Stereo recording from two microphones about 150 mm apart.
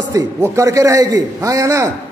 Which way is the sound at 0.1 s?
20° right (ahead or behind).